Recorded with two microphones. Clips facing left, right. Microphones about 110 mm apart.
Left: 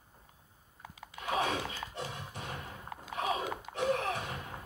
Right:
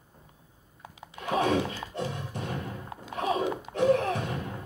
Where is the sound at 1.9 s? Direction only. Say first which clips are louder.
Right 7 dB; 40° right (ahead or behind).